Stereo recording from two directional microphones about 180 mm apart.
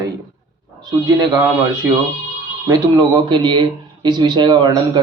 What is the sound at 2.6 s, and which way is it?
Speech, 20° right (ahead or behind).